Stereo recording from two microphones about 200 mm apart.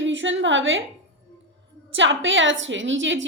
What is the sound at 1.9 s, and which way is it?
A woman's voice, 70° right (ahead or behind).